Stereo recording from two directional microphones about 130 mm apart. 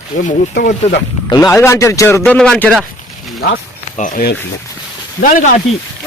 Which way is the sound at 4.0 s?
85° left.